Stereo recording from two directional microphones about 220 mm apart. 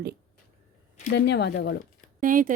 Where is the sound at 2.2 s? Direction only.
40° right (ahead or behind).